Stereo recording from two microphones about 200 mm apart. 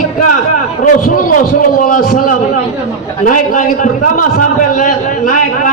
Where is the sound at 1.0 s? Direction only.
45° left (ahead or behind).